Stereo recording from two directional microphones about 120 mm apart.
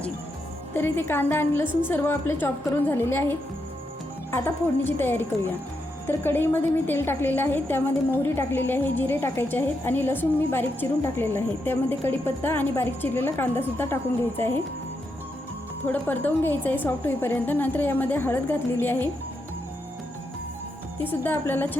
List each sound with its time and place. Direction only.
0.7 s a woman's voice: 20° left (ahead or behind)
15.9 s a woman's voice: 15° left (ahead or behind)
21.0 s a woman's voice: 15° left (ahead or behind)